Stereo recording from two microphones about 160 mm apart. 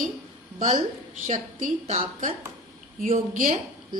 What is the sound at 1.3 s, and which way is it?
A woman's voice, 50° right (ahead or behind).